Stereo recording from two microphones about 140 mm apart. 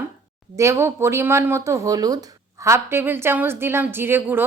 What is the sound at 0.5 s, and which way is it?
A woman's voice, 20° right (ahead or behind).